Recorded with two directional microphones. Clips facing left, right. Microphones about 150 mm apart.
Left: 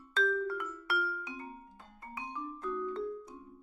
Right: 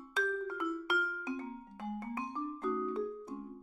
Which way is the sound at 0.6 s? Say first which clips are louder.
Right 2 dB; 25° right (ahead or behind).